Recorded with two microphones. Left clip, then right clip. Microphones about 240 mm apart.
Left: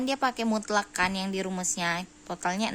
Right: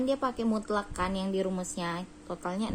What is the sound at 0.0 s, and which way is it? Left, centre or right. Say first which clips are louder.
A woman's voice: left 2 dB; left.